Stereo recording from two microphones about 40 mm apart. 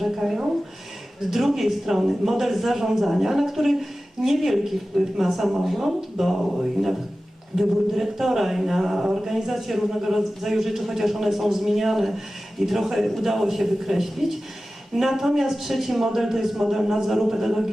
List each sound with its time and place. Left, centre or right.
0.0 s speech: centre